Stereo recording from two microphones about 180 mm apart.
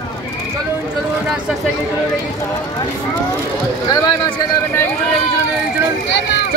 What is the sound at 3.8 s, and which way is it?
Speech, 25° left (ahead or behind).